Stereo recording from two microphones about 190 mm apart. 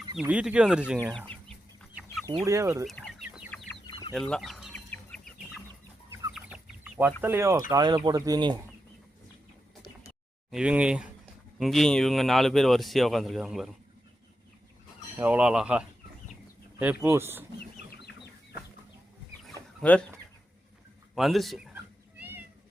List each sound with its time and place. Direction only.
0.2 s speech: 5° right (ahead or behind)
2.4 s speech: 15° right (ahead or behind)
2.8 s chicken: 5° left (ahead or behind)
3.8 s chicken: 25° left (ahead or behind)
4.1 s chicken: centre (ahead or behind)
6.3 s chicken: 5° right (ahead or behind)
7.2 s speech: 10° right (ahead or behind)
10.5 s speech: 5° right (ahead or behind)
15.2 s speech: 5° right (ahead or behind)
19.5 s chicken: 5° left (ahead or behind)
21.2 s speech: centre (ahead or behind)
22.2 s meow: 10° right (ahead or behind)